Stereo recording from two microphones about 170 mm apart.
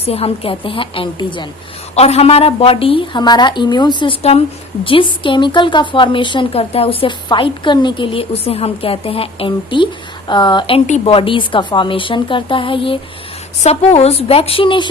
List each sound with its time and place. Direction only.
0.0 s a woman's voice: 35° left (ahead or behind)